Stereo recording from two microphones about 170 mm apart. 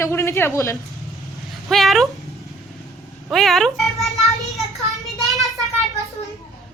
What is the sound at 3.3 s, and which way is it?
A woman's voice, centre (ahead or behind).